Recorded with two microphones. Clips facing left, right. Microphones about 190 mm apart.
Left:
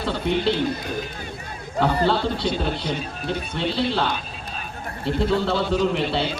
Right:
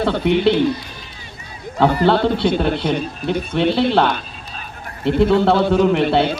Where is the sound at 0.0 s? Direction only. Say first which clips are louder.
Right 7 dB; 65° right (ahead or behind).